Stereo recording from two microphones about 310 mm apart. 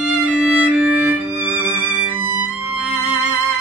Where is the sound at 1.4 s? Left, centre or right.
Centre.